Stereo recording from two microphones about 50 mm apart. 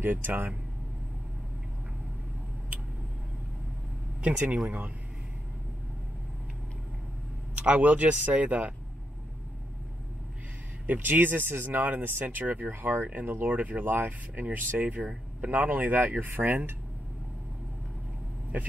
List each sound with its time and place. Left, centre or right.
0.0 s speech: right
4.2 s speech: right
7.5 s speech: right
10.9 s speech: right
15.0 s speech: right
15.5 s speech: right